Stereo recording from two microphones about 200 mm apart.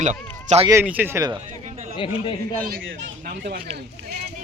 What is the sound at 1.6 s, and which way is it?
Chatter, 35° right (ahead or behind).